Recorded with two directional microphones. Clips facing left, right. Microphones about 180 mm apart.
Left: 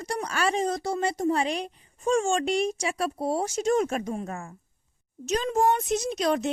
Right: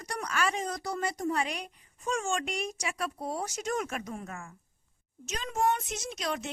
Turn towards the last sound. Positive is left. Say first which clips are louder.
# left 9 dB
turn(degrees=35)  # may be behind; listen again after turning